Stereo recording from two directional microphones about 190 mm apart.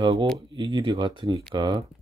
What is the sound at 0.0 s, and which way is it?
Speech, 25° right (ahead or behind).